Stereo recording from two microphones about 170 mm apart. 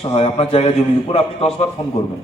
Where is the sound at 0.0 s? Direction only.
35° left (ahead or behind).